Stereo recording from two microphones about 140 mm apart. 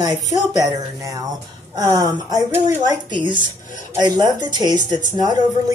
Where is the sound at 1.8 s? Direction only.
25° right (ahead or behind).